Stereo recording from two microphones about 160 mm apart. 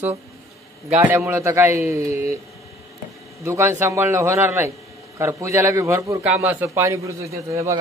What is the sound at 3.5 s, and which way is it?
A man's voice, 15° right (ahead or behind).